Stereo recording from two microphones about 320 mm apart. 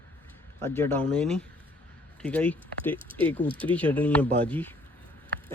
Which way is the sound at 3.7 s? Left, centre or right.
Centre.